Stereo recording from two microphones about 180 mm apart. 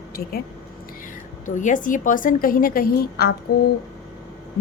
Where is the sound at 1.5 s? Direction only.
45° left (ahead or behind).